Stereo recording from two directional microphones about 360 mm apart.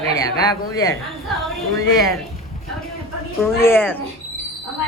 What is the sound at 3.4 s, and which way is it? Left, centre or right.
Speech, centre.